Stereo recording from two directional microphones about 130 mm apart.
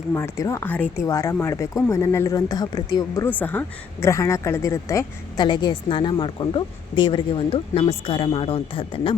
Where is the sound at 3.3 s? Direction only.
15° left (ahead or behind); by 9.1 s 45° left (ahead or behind).